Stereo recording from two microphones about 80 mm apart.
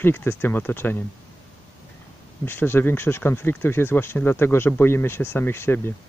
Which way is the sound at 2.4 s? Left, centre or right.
Left.